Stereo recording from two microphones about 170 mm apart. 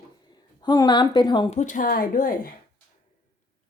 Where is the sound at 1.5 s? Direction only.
45° left (ahead or behind).